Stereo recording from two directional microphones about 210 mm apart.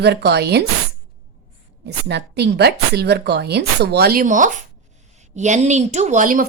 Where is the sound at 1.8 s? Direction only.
50° right (ahead or behind).